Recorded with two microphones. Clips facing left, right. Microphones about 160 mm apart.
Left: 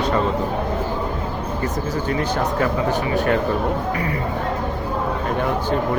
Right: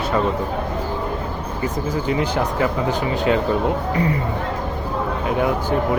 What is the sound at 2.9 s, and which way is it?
Speech, 15° right (ahead or behind).